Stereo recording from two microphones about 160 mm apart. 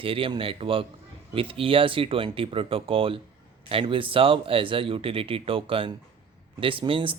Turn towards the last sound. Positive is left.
turn(degrees=-35)  # may be behind; listen again after turning